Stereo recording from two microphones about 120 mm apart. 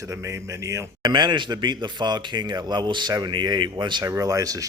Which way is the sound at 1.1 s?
40° right (ahead or behind).